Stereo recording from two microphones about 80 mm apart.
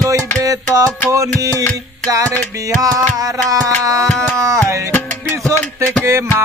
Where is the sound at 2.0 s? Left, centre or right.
Right.